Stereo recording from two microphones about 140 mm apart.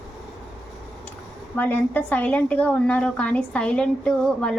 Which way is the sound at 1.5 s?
10° left (ahead or behind).